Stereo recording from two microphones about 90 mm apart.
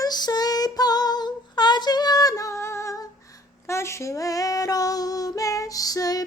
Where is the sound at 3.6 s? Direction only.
30° left (ahead or behind).